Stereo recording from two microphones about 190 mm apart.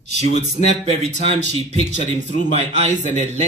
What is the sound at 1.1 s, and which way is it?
Speech, 35° right (ahead or behind).